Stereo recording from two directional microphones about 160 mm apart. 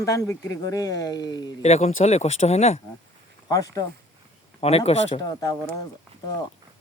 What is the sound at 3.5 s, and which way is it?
Speech, 20° left (ahead or behind).